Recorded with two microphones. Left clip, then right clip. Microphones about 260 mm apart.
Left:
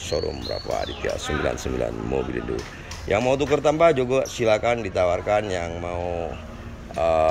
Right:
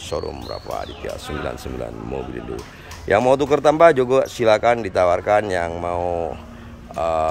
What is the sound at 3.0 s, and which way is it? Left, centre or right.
Speech, centre.